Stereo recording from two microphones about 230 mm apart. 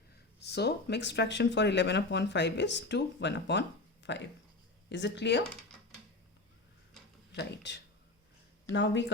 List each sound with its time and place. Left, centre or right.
0.4 s speech: left
7.3 s speech: left